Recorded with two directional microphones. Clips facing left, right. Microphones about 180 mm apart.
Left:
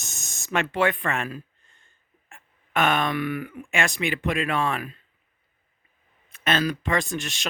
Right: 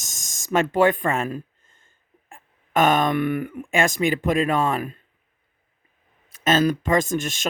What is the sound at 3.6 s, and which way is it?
Speech, 40° right (ahead or behind).